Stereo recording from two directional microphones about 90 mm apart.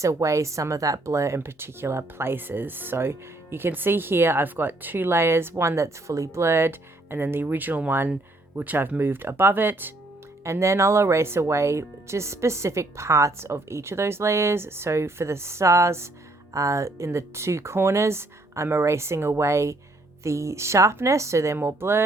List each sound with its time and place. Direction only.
0.0 s speech: 35° right (ahead or behind)